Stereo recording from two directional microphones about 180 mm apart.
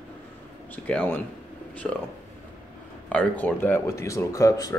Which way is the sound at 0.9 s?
5° left (ahead or behind).